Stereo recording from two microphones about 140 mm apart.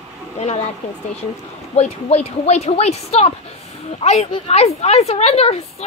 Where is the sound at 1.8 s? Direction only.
50° left (ahead or behind).